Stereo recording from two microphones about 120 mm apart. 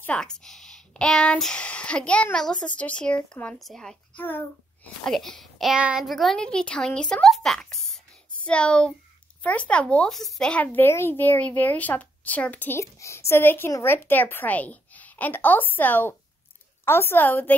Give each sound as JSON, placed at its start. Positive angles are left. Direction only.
{"t": 0.0, "sound": "speech", "side_deg": 10}
{"t": 5.0, "sound": "speech", "side_deg": 5}